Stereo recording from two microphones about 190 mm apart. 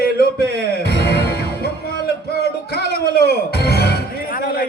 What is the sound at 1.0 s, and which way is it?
Music, 55° left (ahead or behind).